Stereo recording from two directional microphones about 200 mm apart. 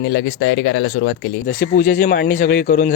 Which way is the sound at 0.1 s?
65° left (ahead or behind).